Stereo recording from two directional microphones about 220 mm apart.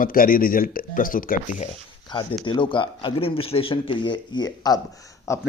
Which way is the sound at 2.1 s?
20° left (ahead or behind).